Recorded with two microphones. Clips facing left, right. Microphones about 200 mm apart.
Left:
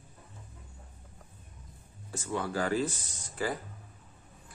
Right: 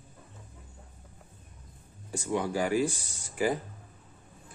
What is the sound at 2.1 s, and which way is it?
Speech, 15° right (ahead or behind).